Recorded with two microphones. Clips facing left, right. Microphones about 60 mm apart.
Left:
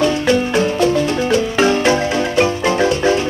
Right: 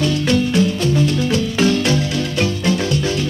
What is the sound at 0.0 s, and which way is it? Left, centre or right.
Marimba, left.